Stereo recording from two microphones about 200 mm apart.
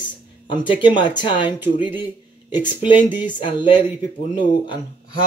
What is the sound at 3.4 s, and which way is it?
Speech, 25° left (ahead or behind).